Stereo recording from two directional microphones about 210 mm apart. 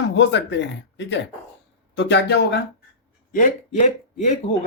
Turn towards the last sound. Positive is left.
turn(degrees=35)  # may be behind; listen again after turning